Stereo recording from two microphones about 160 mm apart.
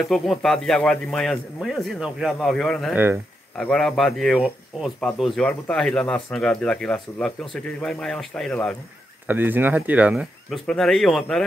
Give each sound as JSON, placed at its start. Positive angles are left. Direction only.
{"t": 0.0, "sound": "speech", "side_deg": 0}
{"t": 2.9, "sound": "speech", "side_deg": -10}
{"t": 3.5, "sound": "speech", "side_deg": 5}
{"t": 9.3, "sound": "speech", "side_deg": -10}
{"t": 10.7, "sound": "speech", "side_deg": 5}